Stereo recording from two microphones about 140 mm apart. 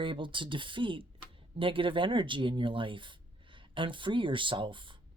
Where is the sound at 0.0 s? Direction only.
35° right (ahead or behind).